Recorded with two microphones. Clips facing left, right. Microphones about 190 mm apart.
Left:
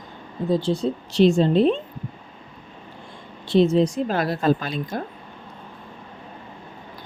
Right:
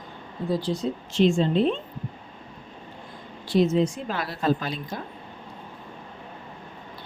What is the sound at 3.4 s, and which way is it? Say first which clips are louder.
A woman's voice: left 4 dB; 25° left (ahead or behind).